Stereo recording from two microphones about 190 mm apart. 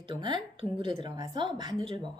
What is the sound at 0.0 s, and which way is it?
A woman's voice, 25° right (ahead or behind).